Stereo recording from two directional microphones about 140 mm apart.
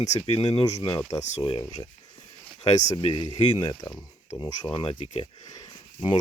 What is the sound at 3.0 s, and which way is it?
Speech, 35° left (ahead or behind).